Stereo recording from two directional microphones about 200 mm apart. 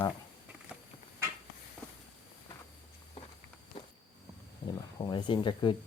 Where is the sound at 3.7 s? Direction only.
25° left (ahead or behind).